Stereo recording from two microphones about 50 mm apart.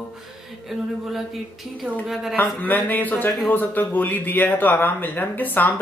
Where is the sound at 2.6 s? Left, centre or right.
Left.